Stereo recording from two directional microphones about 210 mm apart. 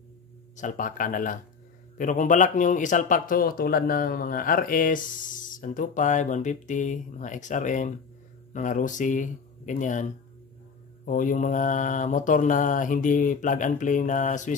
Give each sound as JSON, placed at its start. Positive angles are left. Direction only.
{"t": 0.6, "sound": "speech", "side_deg": 40}